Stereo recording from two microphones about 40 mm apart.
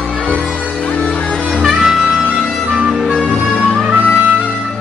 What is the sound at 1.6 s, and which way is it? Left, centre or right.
Music, centre.